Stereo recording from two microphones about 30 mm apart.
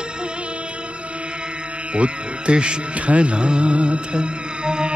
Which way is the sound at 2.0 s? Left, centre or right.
Right.